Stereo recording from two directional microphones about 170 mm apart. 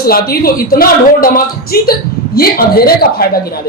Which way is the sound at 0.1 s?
65° left (ahead or behind).